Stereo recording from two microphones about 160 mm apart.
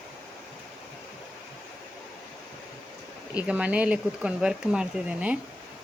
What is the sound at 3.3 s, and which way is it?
Speech, 10° right (ahead or behind).